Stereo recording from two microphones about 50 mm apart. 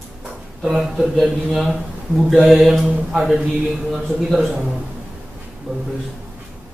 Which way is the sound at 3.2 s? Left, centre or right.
Centre.